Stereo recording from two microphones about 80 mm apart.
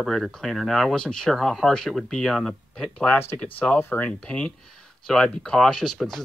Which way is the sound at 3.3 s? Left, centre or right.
Centre.